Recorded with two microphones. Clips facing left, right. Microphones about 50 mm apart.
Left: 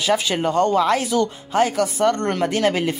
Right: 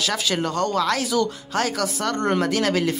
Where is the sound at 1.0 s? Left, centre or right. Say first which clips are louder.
Left 2 dB; centre.